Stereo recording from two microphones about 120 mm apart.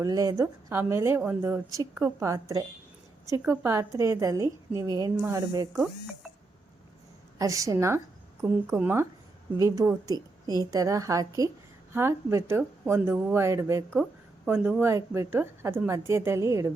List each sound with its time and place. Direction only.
0.0 s a woman's voice: 30° right (ahead or behind)
5.8 s speech: centre (ahead or behind)
7.3 s a woman's voice: 25° right (ahead or behind)
9.6 s a woman's voice: 25° right (ahead or behind)
14.4 s a woman's voice: 10° right (ahead or behind)